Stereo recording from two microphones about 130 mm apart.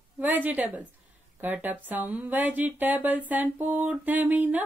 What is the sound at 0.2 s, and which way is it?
Speech, 15° right (ahead or behind).